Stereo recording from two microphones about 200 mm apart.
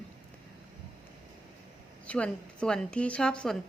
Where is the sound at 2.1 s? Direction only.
5° left (ahead or behind).